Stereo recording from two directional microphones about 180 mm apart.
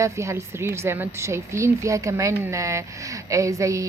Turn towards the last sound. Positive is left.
turn(degrees=-15)  # may be behind; listen again after turning